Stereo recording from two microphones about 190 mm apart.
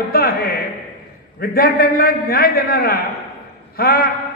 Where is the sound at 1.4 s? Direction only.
50° left (ahead or behind).